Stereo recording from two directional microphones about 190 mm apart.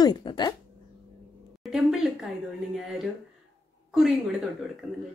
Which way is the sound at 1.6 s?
Centre (ahead or behind).